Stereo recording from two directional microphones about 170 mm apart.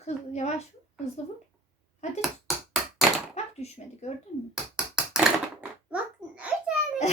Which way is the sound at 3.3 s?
40° left (ahead or behind).